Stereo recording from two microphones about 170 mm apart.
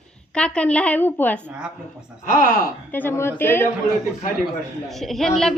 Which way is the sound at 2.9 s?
15° left (ahead or behind).